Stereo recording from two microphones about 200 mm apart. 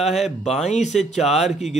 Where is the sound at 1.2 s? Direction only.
Centre (ahead or behind).